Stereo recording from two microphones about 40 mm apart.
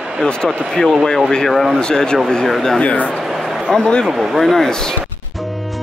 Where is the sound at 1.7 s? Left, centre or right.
Centre.